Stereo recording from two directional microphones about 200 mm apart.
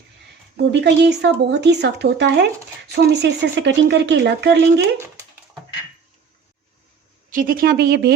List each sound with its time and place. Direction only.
0.5 s speech: 60° right (ahead or behind)
7.3 s speech: 45° right (ahead or behind)